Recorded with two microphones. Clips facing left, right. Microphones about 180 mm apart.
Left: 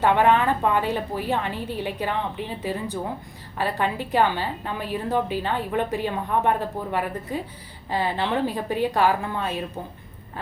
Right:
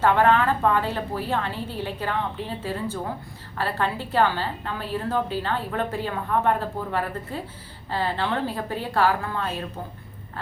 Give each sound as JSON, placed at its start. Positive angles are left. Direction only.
{"t": 0.0, "sound": "a woman's voice", "side_deg": 15}